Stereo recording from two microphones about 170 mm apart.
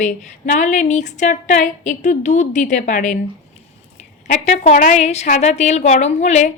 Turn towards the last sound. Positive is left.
turn(degrees=45)  # may be behind; listen again after turning